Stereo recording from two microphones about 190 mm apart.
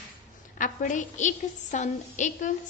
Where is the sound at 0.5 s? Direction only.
45° left (ahead or behind).